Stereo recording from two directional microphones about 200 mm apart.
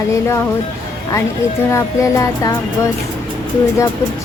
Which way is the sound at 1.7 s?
15° left (ahead or behind).